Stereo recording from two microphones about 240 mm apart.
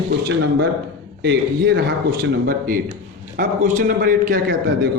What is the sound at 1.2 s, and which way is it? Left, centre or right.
Speech, right.